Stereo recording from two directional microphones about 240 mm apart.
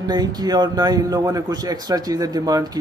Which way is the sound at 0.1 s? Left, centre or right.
Centre.